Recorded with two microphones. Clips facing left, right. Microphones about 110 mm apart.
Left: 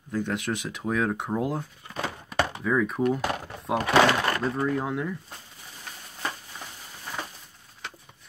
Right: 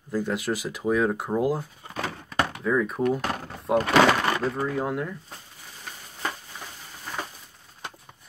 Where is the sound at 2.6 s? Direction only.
Centre (ahead or behind).